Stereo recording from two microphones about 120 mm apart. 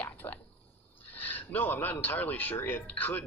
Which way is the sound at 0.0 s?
10° left (ahead or behind).